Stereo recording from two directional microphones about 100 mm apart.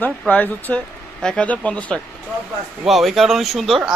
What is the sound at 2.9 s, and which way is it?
Speech, centre (ahead or behind).